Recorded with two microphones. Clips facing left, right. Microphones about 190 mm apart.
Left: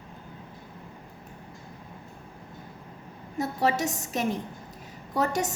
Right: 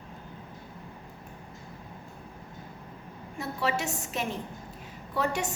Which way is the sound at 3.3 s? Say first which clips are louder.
Left 4 dB; 40° left (ahead or behind).